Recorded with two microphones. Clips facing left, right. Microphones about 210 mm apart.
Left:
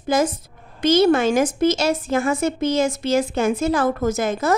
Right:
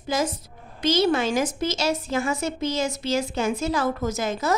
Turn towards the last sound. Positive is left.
turn(degrees=50)  # may be behind; listen again after turning